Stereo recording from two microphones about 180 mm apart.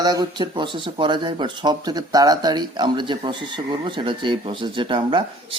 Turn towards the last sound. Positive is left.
turn(degrees=-25)  # may be behind; listen again after turning